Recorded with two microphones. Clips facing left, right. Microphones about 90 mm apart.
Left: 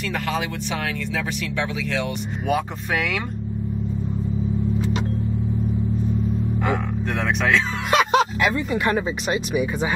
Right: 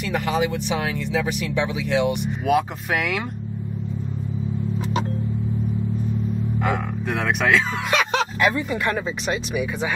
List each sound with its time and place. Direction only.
0.1 s speech: 15° right (ahead or behind)
2.4 s speech: centre (ahead or behind)
6.6 s speech: centre (ahead or behind)